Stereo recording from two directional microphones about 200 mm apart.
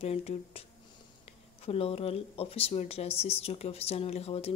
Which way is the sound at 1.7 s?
30° left (ahead or behind).